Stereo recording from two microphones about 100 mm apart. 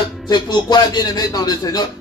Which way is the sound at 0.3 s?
45° left (ahead or behind).